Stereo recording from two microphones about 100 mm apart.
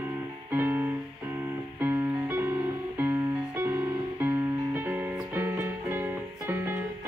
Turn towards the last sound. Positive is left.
turn(degrees=-20)  # may be behind; listen again after turning